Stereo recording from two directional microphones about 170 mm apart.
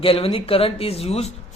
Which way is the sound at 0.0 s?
35° left (ahead or behind).